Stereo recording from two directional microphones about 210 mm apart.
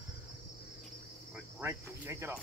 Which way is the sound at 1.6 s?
10° right (ahead or behind).